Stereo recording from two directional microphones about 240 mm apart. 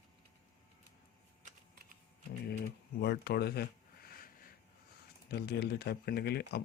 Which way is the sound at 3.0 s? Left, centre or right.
Left.